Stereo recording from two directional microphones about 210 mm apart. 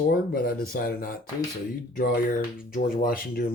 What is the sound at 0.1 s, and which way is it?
Speech, 45° left (ahead or behind).